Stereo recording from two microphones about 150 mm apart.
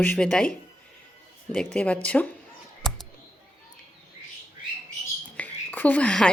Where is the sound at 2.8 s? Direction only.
5° left (ahead or behind).